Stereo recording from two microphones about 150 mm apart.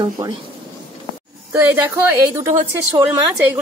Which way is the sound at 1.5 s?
10° right (ahead or behind).